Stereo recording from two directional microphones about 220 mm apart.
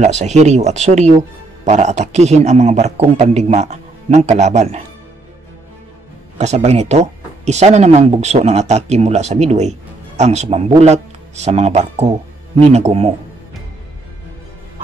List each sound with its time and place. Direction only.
0.0 s speech: 30° right (ahead or behind)
6.3 s speech: 30° right (ahead or behind)